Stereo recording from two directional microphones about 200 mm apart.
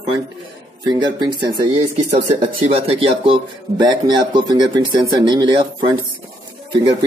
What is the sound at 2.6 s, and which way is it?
Speech, 30° right (ahead or behind).